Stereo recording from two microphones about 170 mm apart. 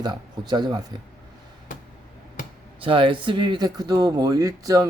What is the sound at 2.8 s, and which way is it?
Speech, 30° right (ahead or behind).